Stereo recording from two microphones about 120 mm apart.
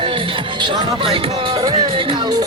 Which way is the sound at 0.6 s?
45° right (ahead or behind).